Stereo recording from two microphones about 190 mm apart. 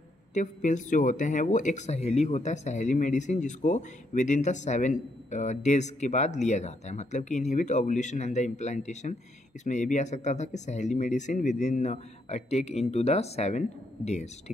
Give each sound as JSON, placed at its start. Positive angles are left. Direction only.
{"t": 0.3, "sound": "speech", "side_deg": 40}